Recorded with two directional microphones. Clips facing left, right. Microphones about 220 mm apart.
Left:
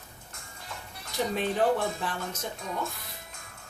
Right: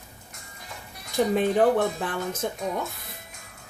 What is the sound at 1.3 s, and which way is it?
Speech, 55° right (ahead or behind).